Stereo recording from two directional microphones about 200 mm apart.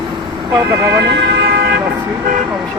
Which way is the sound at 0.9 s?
55° right (ahead or behind).